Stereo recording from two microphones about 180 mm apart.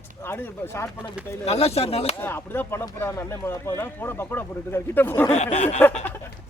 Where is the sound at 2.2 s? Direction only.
10° left (ahead or behind).